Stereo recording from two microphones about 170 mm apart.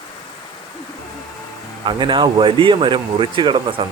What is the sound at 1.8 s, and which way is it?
A man's voice, 30° right (ahead or behind).